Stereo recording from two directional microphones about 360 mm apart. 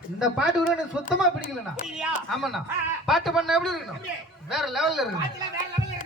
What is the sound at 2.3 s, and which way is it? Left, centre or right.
Speech, centre.